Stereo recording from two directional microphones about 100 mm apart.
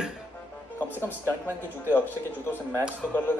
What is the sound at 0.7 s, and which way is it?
Speech, 20° left (ahead or behind).